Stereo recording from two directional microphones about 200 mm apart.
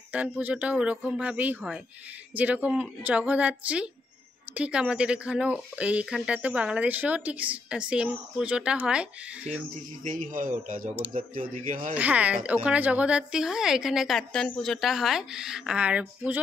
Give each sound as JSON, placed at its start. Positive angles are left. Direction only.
{"t": 0.1, "sound": "speech", "side_deg": -5}
{"t": 10.3, "sound": "a man's voice", "side_deg": -40}
{"t": 11.9, "sound": "speech", "side_deg": -5}